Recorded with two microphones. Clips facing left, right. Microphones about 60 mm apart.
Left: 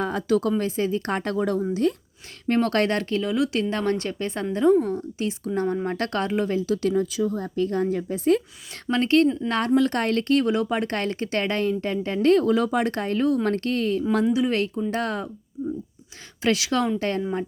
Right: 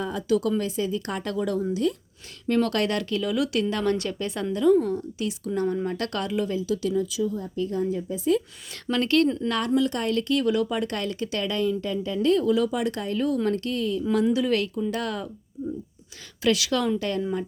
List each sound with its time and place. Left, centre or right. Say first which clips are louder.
0.0 s speech: left 2 dB; left
8.9 s speech: left 2 dB; left
9.5 s speech: left 3 dB; left
14.3 s speech: left 1 dB; left
16.4 s speech: left 1 dB; left